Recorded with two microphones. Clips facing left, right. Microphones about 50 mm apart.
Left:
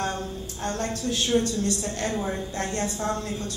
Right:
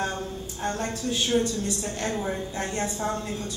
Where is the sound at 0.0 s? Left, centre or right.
Centre.